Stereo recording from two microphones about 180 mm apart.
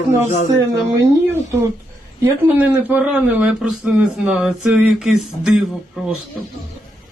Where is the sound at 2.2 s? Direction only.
10° right (ahead or behind).